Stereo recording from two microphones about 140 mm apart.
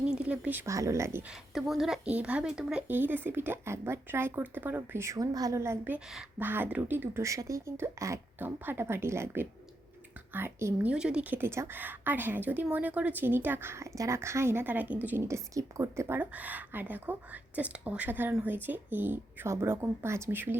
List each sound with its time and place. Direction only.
0.0 s a woman's voice: 5° right (ahead or behind)
1.3 s a woman's voice: centre (ahead or behind); by 10.9 s 15° right (ahead or behind)
10.9 s a woman's voice: 5° right (ahead or behind)